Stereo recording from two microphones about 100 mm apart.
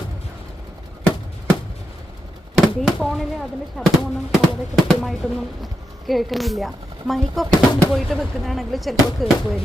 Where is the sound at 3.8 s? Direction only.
10° left (ahead or behind).